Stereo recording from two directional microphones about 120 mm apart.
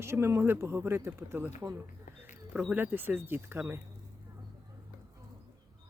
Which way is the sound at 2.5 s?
10° right (ahead or behind).